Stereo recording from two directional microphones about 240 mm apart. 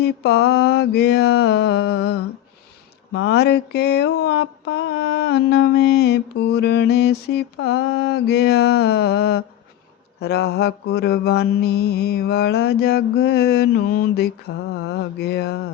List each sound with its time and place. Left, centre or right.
0.0 s mantra: left